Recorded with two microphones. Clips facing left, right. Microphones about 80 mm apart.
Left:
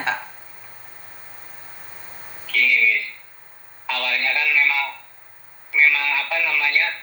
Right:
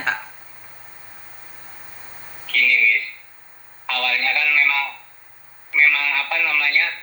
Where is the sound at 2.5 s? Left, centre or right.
Right.